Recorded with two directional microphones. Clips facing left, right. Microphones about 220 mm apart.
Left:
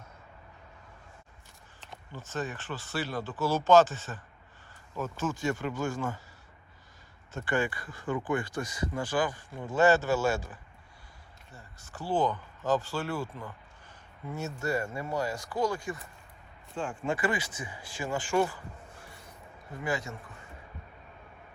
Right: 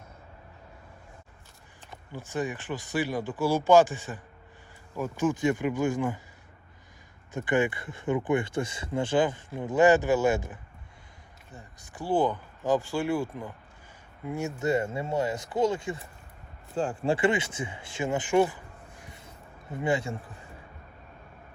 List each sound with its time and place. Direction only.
2.1 s speech: 15° right (ahead or behind)
7.3 s speech: 20° right (ahead or behind)
16.7 s speech: 40° right (ahead or behind); by 18.6 s 20° right (ahead or behind)
19.8 s speech: 30° right (ahead or behind)